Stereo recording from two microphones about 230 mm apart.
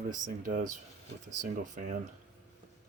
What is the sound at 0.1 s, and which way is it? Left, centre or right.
Speech, right.